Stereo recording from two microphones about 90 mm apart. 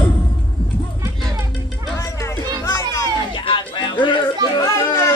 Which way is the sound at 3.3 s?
65° left (ahead or behind).